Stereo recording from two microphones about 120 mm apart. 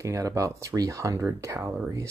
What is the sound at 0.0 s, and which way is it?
Speech, 25° right (ahead or behind).